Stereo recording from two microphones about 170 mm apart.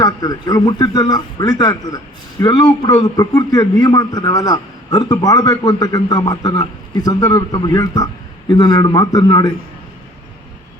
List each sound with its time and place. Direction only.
0.0 s a man's voice: 25° left (ahead or behind)